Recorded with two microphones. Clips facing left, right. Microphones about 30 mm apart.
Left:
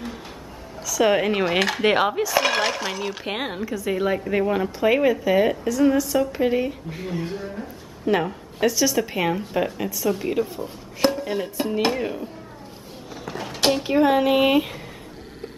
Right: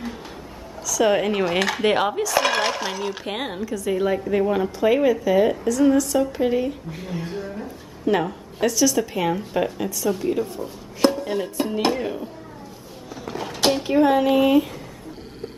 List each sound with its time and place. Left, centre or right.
0.8 s a woman's voice: centre
13.4 s a sound: centre
13.8 s a woman's voice: centre
14.2 s speech: left